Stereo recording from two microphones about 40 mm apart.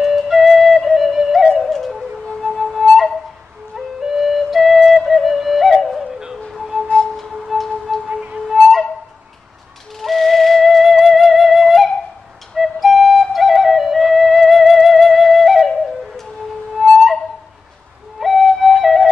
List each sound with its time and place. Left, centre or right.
0.0 s music: centre
2.4 s flute: centre
6.5 s music: centre
8.1 s music: right
8.5 s flute: centre
9.9 s music: centre
12.5 s flute: centre
13.3 s music: centre
16.7 s music: centre
18.2 s music: centre